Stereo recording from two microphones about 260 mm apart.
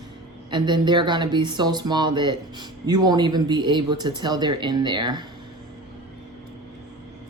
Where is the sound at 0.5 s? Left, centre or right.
Centre.